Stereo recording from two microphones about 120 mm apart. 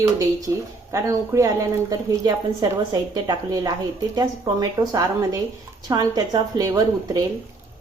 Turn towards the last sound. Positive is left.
turn(degrees=-30)  # may be behind; listen again after turning